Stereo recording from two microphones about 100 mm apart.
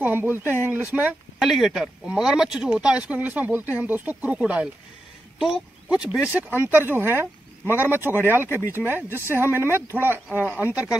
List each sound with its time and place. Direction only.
0.0 s speech: 20° right (ahead or behind)
1.4 s speech: centre (ahead or behind)